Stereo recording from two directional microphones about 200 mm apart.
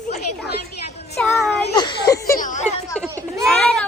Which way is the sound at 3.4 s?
5° left (ahead or behind).